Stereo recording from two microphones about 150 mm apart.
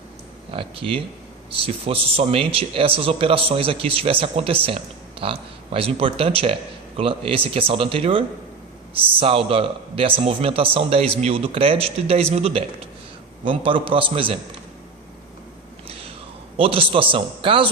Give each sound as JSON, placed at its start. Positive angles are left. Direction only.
{"t": 0.5, "sound": "speech", "side_deg": -40}
{"t": 9.2, "sound": "speech", "side_deg": -40}
{"t": 15.9, "sound": "a sound", "side_deg": -40}
{"t": 16.6, "sound": "speech", "side_deg": -35}